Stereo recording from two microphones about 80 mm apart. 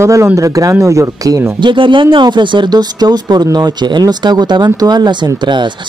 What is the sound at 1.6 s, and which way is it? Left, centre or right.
Speech, right.